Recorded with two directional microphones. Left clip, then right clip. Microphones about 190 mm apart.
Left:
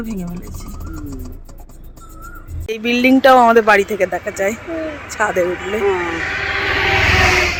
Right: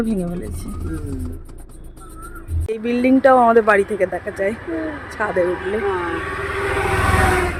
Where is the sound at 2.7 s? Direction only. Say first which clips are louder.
Left 3 dB; centre (ahead or behind).